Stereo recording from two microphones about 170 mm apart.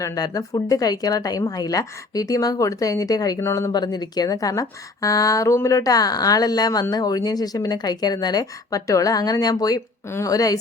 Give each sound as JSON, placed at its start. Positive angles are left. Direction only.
{"t": 0.0, "sound": "speech", "side_deg": 20}